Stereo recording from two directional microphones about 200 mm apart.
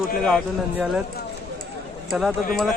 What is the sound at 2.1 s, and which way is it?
Speech, 5° right (ahead or behind).